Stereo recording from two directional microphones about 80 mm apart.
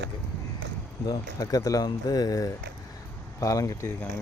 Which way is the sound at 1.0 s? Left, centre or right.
Left.